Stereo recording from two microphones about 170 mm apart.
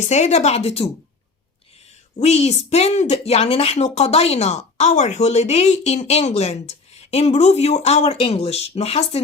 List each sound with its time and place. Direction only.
0.0 s speech: 40° left (ahead or behind)
2.1 s speech: 40° left (ahead or behind)